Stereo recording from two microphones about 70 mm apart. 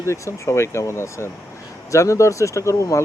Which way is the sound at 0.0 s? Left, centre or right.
Left.